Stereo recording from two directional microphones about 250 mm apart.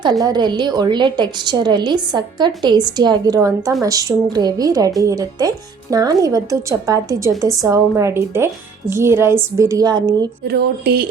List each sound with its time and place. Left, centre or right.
0.0 s speech: centre
10.4 s speech: right